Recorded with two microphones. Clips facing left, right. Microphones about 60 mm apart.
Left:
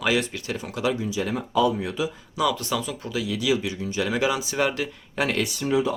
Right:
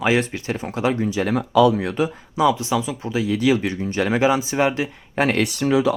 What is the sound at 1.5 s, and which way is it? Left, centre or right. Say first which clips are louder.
Speech: right 6 dB; right.